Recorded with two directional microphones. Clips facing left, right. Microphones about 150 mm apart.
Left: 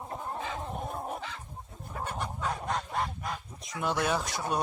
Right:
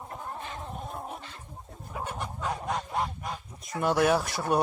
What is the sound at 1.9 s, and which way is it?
Goose, 5° right (ahead or behind).